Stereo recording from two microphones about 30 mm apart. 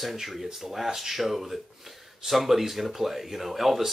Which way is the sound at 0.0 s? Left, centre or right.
Centre.